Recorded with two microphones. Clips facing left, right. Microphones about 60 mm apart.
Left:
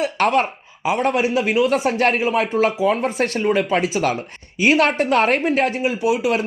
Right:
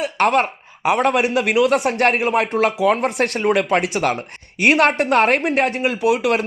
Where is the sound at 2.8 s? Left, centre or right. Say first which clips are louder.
Right 4 dB; right.